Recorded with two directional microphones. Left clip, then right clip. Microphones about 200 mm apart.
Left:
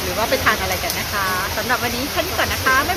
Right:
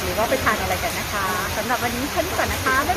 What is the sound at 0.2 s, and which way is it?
Speech, centre (ahead or behind).